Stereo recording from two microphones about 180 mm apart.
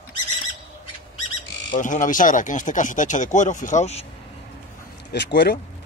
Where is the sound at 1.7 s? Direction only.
45° left (ahead or behind).